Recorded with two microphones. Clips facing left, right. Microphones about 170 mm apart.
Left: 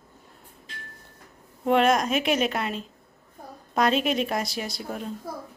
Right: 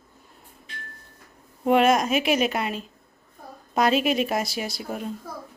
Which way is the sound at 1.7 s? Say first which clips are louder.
Right 2 dB; 5° right (ahead or behind).